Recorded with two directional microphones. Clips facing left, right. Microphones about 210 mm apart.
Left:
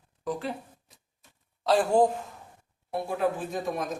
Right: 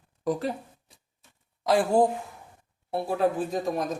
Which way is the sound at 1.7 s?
10° right (ahead or behind).